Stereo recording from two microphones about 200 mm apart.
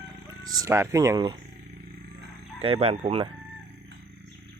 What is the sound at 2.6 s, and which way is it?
Speech, 30° right (ahead or behind).